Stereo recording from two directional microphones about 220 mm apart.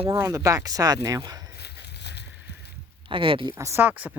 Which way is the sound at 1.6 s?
50° left (ahead or behind).